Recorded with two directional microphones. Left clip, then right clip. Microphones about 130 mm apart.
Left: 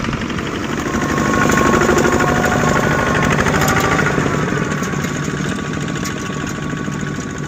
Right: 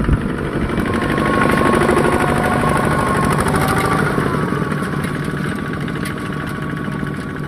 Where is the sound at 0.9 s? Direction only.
70° left (ahead or behind).